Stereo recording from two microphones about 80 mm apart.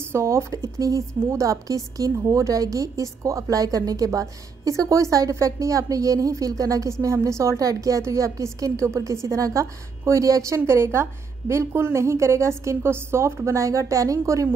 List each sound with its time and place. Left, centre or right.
0.0 s a woman's voice: right
10.6 s a woman's voice: right